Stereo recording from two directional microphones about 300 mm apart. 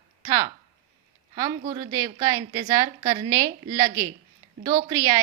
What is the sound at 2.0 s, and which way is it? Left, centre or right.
A woman's voice, centre.